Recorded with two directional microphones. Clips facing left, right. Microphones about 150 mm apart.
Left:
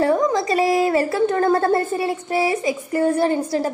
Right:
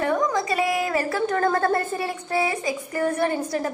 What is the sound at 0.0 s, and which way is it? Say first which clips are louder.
A woman's voice: left 5 dB; 30° left (ahead or behind).